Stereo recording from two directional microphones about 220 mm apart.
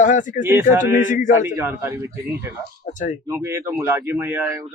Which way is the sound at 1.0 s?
35° left (ahead or behind).